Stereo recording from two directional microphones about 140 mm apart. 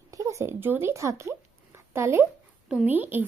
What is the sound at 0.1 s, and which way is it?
A child's voice, 20° right (ahead or behind).